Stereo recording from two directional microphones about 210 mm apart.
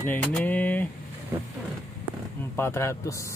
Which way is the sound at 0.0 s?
5° left (ahead or behind).